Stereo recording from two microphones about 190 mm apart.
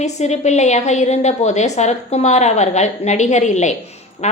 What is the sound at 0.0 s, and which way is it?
A woman's voice, 35° left (ahead or behind).